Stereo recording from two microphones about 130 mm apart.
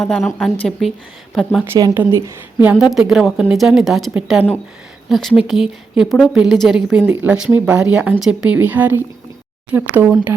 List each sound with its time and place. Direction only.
0.0 s speech: 5° left (ahead or behind)
1.7 s a woman's voice: 20° right (ahead or behind)
2.6 s speech: 5° right (ahead or behind)